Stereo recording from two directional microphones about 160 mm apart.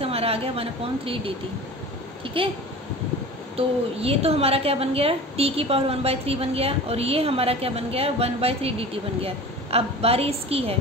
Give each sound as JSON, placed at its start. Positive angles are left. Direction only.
{"t": 0.0, "sound": "a woman's voice", "side_deg": -40}
{"t": 3.5, "sound": "a woman's voice", "side_deg": -40}